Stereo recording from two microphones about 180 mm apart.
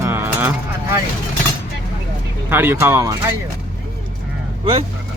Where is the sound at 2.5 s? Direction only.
10° right (ahead or behind).